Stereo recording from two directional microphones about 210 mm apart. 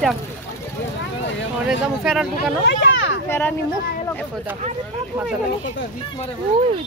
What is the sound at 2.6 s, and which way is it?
Speech, 60° left (ahead or behind).